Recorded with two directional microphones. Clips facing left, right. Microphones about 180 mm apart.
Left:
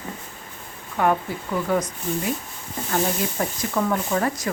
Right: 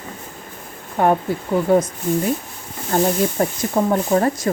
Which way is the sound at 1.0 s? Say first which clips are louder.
Right 4 dB; 35° right (ahead or behind).